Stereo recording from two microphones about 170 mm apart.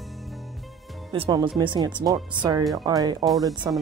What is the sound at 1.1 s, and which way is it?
Speech, 30° right (ahead or behind).